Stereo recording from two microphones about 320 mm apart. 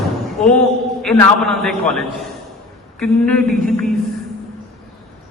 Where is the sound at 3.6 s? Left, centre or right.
Centre.